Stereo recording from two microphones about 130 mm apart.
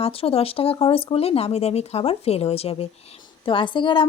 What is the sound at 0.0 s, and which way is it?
Speech, 50° left (ahead or behind).